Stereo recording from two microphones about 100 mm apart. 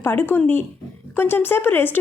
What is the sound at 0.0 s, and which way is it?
A woman's voice, 20° left (ahead or behind).